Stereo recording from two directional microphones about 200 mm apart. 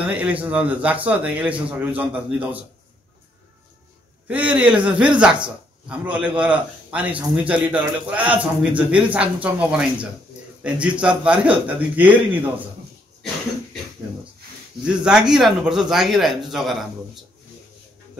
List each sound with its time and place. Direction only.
0.0 s a man's voice: 5° right (ahead or behind)
4.3 s a man's voice: 5° right (ahead or behind)
5.9 s a man's voice: 5° right (ahead or behind)
14.9 s speech: 5° right (ahead or behind)